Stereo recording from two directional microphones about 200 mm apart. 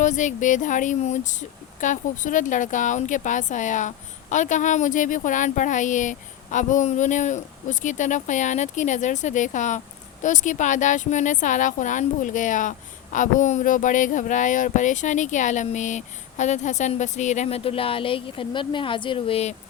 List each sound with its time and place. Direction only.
0.0 s speech: 40° left (ahead or behind)